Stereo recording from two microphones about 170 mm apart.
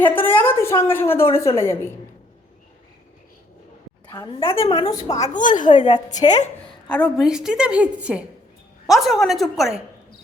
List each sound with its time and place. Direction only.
0.0 s a woman's voice: 10° left (ahead or behind)
4.1 s a woman's voice: 25° left (ahead or behind)
5.3 s a woman's voice: 50° left (ahead or behind)
6.9 s a woman's voice: centre (ahead or behind)